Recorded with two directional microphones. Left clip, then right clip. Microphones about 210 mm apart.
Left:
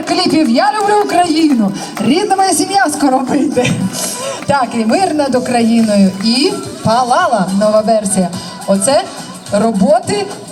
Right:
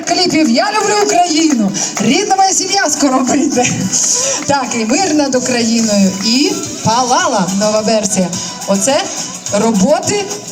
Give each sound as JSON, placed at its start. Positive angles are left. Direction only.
{"t": 0.1, "sound": "music", "side_deg": -30}
{"t": 0.5, "sound": "a woman's voice", "side_deg": -30}
{"t": 5.6, "sound": "speech", "side_deg": 10}
{"t": 6.4, "sound": "speech", "side_deg": -25}